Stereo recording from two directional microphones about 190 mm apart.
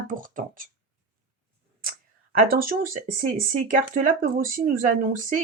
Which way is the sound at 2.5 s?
50° right (ahead or behind).